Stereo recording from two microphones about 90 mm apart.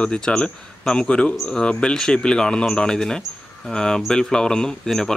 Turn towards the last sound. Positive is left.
turn(degrees=5)  # may be behind; listen again after turning